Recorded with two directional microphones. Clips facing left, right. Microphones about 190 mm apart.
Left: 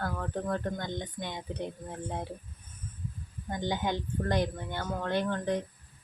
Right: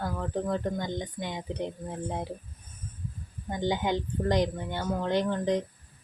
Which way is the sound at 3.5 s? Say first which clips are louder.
Right 3 dB; 15° right (ahead or behind).